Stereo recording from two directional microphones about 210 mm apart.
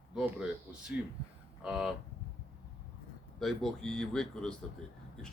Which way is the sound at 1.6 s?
5° right (ahead or behind).